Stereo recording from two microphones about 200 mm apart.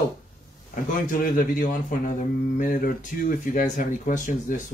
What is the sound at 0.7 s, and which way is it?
Speech, 40° left (ahead or behind).